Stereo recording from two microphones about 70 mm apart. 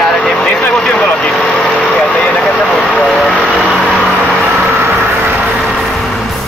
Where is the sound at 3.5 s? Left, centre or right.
Centre.